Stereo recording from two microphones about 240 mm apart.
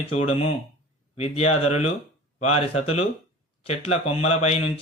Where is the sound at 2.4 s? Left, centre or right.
Left.